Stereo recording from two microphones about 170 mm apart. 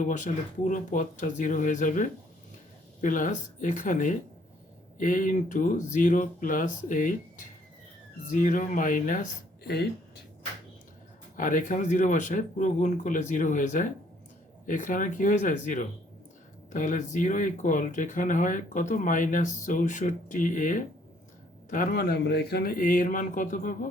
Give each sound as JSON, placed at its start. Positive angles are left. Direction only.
{"t": 0.0, "sound": "speech", "side_deg": 45}
{"t": 11.3, "sound": "speech", "side_deg": 50}
{"t": 22.3, "sound": "speech", "side_deg": 75}